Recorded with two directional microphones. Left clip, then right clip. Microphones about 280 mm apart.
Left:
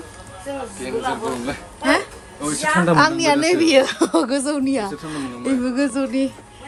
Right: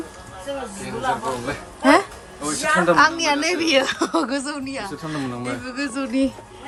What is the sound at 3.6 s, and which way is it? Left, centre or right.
A woman's voice, centre.